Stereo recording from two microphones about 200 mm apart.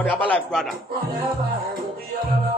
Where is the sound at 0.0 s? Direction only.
5° left (ahead or behind).